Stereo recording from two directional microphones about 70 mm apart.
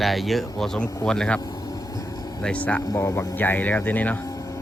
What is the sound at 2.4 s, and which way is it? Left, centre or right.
Speech, centre.